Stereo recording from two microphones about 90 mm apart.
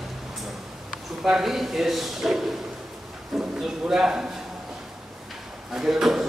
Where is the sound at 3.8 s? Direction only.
5° right (ahead or behind).